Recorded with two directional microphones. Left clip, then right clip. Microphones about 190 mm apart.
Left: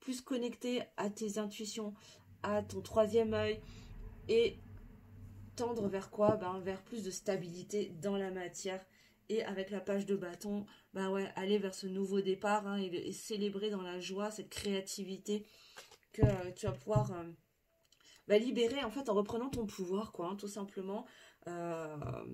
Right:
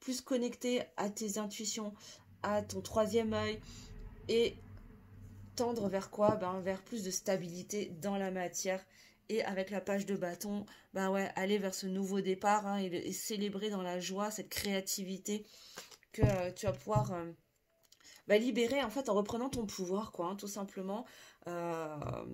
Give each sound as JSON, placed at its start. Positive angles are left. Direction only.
{"t": 0.0, "sound": "speech", "side_deg": -35}